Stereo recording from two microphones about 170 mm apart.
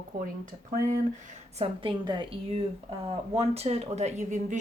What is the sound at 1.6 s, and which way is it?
A woman's voice, 30° right (ahead or behind).